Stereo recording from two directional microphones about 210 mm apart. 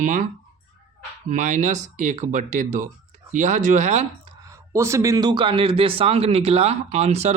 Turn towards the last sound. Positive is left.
turn(degrees=-30)  # may be behind; listen again after turning